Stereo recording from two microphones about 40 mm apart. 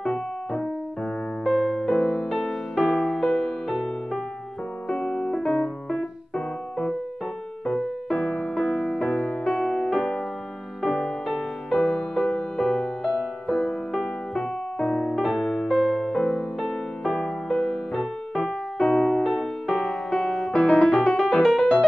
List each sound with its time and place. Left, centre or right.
0.0 s keyboard: centre
1.4 s electric piano: centre
1.9 s music: centre
2.8 s music: left
3.6 s music: centre
4.9 s piano: left
7.6 s music: centre
13.0 s music: centre; by 15.2 s left
15.2 s music: centre
15.7 s music: centre; by 19.2 s left
19.2 s music: centre